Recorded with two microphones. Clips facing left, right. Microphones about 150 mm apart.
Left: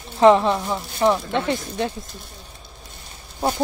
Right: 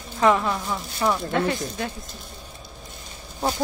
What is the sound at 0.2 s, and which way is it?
Speech, 30° left (ahead or behind).